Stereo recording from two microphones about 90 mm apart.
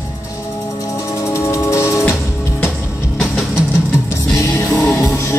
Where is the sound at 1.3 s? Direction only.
35° left (ahead or behind).